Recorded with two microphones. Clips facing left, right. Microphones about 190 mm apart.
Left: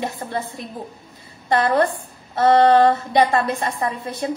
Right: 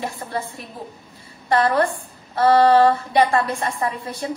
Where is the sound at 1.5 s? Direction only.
20° left (ahead or behind).